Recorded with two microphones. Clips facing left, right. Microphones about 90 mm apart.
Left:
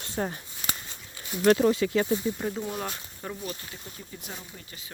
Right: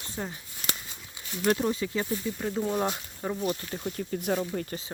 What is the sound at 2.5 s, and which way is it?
Speech, 15° right (ahead or behind).